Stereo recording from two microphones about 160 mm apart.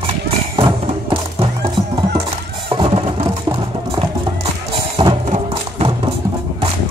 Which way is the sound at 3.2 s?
30° right (ahead or behind).